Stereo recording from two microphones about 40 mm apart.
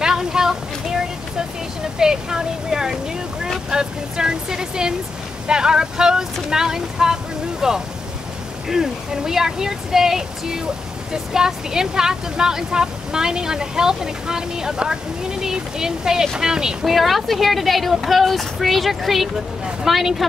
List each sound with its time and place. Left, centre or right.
0.0 s a sound: centre
2.0 s speech: centre
16.8 s speech: centre